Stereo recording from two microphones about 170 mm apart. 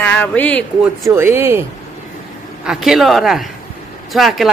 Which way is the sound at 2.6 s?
5° right (ahead or behind).